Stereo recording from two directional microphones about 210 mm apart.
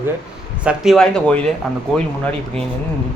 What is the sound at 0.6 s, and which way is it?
Speech, 5° right (ahead or behind).